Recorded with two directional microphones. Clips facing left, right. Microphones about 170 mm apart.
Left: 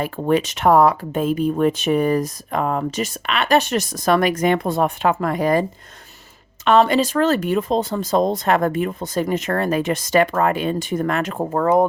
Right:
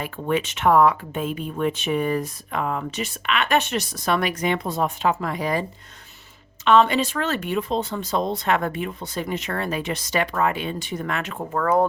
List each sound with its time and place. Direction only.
0.0 s speech: 40° left (ahead or behind)
6.7 s speech: 40° left (ahead or behind)